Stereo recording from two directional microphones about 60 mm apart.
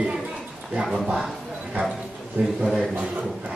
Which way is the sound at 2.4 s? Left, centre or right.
Right.